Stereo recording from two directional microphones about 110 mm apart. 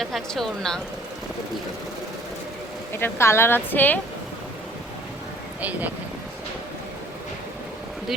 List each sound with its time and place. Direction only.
0.0 s speech: centre (ahead or behind)
2.9 s speech: 20° left (ahead or behind)